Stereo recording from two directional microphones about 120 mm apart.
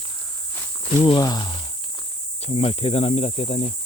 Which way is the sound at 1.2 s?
35° left (ahead or behind).